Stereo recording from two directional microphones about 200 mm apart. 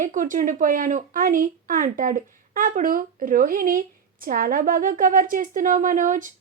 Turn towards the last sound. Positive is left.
turn(degrees=-40)  # may be behind; listen again after turning